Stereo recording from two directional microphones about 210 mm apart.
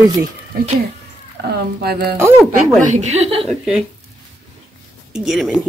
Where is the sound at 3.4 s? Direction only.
Centre (ahead or behind).